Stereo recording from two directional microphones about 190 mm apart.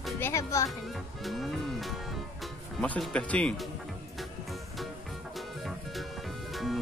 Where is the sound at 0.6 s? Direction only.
Centre (ahead or behind).